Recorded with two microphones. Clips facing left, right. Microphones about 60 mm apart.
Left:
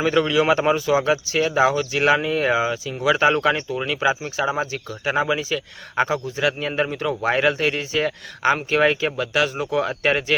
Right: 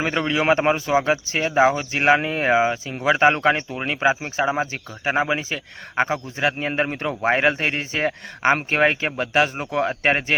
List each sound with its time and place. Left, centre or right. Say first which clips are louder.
0.0 s speech: left 3 dB; right